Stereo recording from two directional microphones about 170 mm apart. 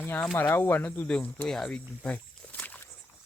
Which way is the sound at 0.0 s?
10° left (ahead or behind).